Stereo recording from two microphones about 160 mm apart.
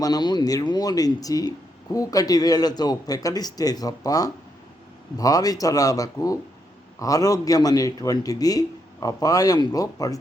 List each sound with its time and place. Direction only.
0.0 s speech: 25° left (ahead or behind)